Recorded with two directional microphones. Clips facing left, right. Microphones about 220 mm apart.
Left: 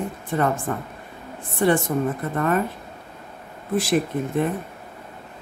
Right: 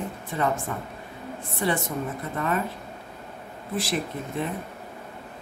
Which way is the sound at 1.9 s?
55° left (ahead or behind).